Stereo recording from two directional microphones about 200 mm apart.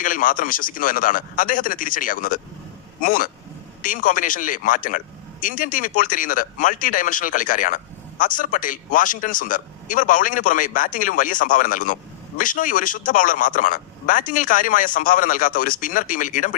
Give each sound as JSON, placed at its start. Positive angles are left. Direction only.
{"t": 0.0, "sound": "a man's voice", "side_deg": 45}